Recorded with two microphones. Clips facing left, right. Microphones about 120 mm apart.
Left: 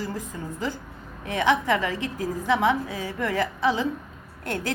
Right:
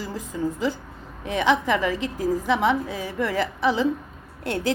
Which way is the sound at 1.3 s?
20° right (ahead or behind).